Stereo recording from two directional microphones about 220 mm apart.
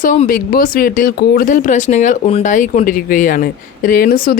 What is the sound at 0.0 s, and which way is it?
Speech, 35° left (ahead or behind).